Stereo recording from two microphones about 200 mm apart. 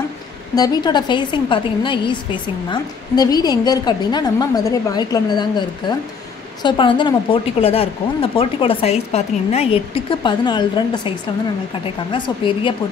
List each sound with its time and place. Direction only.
0.6 s a woman's voice: 20° left (ahead or behind)
12.1 s a woman's voice: 25° left (ahead or behind)